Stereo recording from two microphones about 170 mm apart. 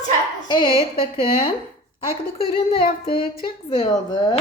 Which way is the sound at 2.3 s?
30° left (ahead or behind).